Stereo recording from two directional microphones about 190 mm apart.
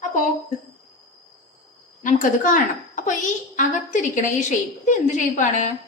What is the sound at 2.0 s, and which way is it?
A woman's voice, 45° left (ahead or behind).